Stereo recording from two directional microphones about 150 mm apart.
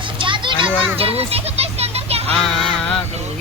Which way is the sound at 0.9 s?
40° right (ahead or behind).